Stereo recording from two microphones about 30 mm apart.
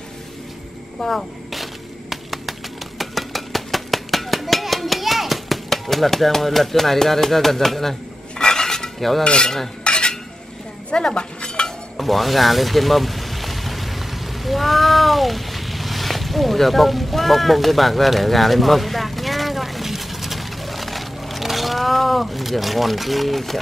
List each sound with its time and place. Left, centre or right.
1.1 s a sound: centre
8.4 s dishes: left
9.2 s cutlery: left
12.0 s vehicle: centre